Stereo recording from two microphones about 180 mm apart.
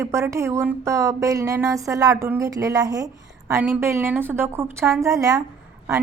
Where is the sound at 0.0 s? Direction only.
15° right (ahead or behind).